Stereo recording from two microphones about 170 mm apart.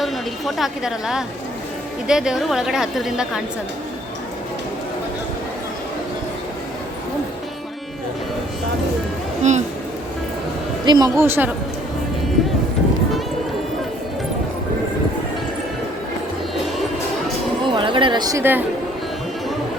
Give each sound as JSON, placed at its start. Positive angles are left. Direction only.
{"t": 0.0, "sound": "a woman's voice", "side_deg": 0}
{"t": 9.4, "sound": "speech", "side_deg": -45}
{"t": 10.8, "sound": "a woman's voice", "side_deg": -25}
{"t": 17.7, "sound": "speech", "side_deg": -30}